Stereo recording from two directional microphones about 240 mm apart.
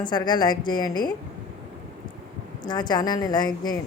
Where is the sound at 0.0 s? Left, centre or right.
Centre.